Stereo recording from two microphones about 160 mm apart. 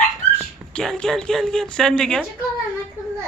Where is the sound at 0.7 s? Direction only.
5° left (ahead or behind).